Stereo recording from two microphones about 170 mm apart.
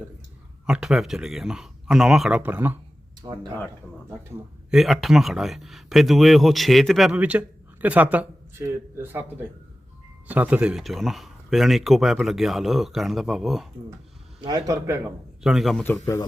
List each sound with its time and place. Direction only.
0.7 s speech: 5° right (ahead or behind)
3.2 s a man's voice: 25° right (ahead or behind)
4.7 s speech: centre (ahead or behind)
14.4 s a man's voice: 20° right (ahead or behind)
15.4 s speech: centre (ahead or behind)
15.8 s a man's voice: 15° left (ahead or behind)